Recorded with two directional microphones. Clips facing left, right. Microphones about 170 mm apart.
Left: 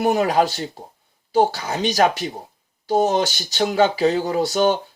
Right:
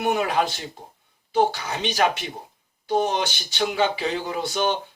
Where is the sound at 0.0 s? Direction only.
35° left (ahead or behind).